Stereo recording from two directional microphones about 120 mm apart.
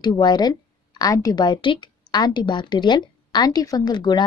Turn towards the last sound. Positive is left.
turn(degrees=35)  # may be behind; listen again after turning